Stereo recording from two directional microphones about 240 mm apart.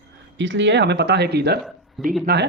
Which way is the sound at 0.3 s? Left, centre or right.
Right.